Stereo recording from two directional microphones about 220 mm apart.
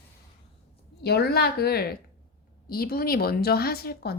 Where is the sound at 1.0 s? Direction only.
45° left (ahead or behind).